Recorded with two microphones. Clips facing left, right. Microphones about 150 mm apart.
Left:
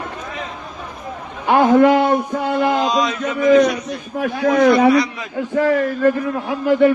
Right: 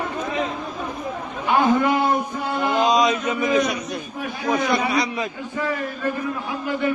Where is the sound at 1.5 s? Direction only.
75° left (ahead or behind).